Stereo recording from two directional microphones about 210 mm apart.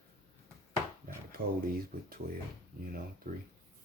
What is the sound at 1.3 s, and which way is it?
Speech, 45° right (ahead or behind).